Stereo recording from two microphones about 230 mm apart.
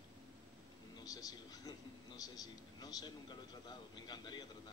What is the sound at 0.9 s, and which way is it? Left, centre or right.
A man's voice, centre.